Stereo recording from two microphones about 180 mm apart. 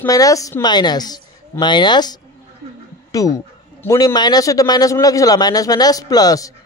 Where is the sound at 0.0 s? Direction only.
20° left (ahead or behind).